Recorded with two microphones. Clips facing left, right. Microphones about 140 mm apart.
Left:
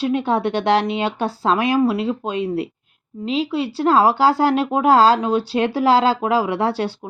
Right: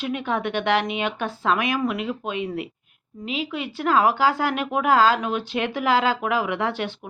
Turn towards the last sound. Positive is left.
turn(degrees=35)  # may be behind; listen again after turning